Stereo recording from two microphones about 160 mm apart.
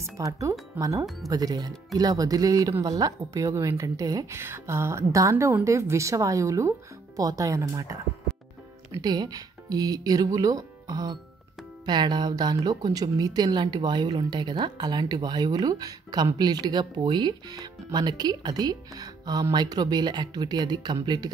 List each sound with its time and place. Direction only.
0.0 s a woman's voice: 20° right (ahead or behind)